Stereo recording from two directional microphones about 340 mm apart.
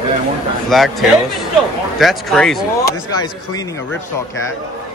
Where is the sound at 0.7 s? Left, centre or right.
Centre.